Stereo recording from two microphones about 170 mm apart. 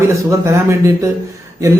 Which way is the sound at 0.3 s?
15° right (ahead or behind).